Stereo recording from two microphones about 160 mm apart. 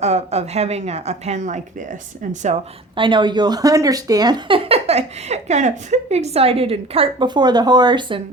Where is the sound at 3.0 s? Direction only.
30° right (ahead or behind).